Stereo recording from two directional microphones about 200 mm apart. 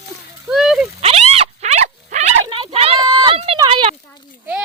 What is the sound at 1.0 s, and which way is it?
Speech, 30° right (ahead or behind).